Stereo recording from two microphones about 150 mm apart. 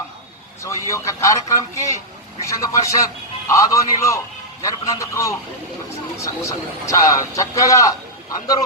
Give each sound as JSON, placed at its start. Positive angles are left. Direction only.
{"t": 0.6, "sound": "a man's voice", "side_deg": 20}